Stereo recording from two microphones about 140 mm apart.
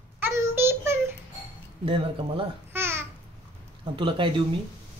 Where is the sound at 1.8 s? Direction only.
40° right (ahead or behind).